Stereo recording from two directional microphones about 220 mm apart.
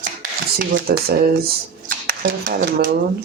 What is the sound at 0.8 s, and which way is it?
Speech, 45° right (ahead or behind).